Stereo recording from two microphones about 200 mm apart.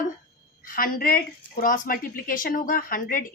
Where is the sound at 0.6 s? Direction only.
45° left (ahead or behind).